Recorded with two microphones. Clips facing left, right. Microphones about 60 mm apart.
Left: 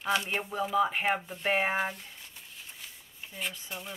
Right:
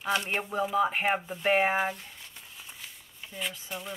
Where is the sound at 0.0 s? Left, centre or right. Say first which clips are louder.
Right 1 dB; centre.